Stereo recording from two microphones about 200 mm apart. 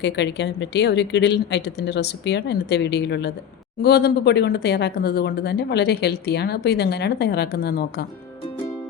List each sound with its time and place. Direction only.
0.0 s speech: 60° left (ahead or behind)